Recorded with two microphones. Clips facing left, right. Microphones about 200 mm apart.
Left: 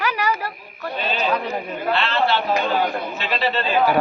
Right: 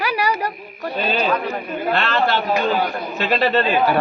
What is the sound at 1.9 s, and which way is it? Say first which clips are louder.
A man's voice: right 1 dB; 45° right (ahead or behind).